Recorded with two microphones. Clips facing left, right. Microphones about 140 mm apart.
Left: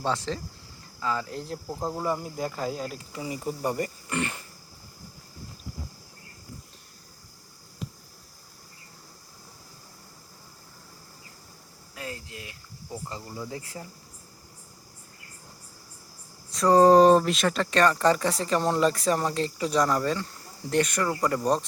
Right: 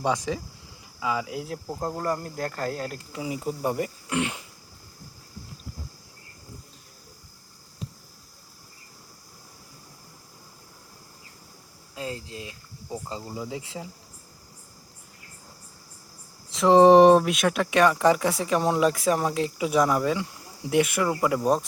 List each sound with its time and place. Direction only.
0.0 s speech: 15° right (ahead or behind)
11.9 s speech: 25° right (ahead or behind)
16.6 s a sound: 20° right (ahead or behind)
17.1 s speech: 5° right (ahead or behind)